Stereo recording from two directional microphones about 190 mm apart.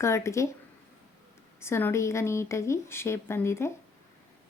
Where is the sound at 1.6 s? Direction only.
15° left (ahead or behind).